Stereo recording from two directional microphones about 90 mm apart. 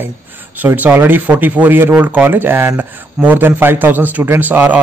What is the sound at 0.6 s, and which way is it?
Speech, 20° right (ahead or behind).